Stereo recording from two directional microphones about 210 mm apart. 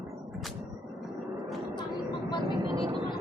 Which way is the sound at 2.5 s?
20° right (ahead or behind).